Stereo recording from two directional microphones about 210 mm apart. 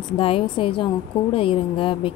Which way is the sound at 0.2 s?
25° left (ahead or behind).